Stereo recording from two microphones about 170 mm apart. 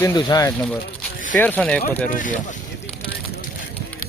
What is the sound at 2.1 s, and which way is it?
Speech, 50° left (ahead or behind).